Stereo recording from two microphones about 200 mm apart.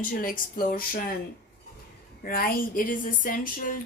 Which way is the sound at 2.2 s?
45° left (ahead or behind).